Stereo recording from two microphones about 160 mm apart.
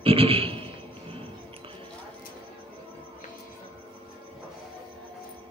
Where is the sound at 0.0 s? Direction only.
35° right (ahead or behind).